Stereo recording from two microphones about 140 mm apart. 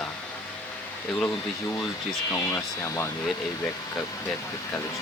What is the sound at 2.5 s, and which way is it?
Speech, 20° left (ahead or behind).